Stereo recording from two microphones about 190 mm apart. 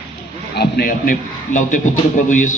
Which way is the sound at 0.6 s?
50° left (ahead or behind).